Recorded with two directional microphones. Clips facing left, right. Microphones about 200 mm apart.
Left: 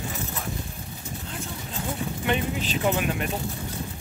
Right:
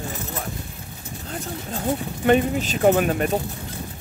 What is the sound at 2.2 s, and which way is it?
Speech, 45° right (ahead or behind).